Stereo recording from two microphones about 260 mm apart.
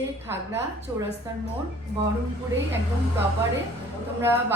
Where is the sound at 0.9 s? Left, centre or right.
Centre.